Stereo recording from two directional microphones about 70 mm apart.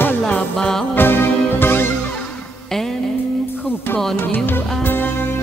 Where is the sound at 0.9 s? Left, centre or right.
Left.